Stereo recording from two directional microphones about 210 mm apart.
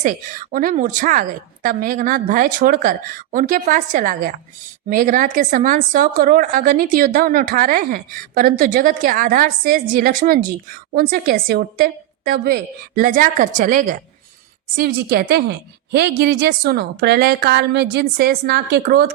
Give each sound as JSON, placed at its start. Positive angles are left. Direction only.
{"t": 0.0, "sound": "a woman's voice", "side_deg": -40}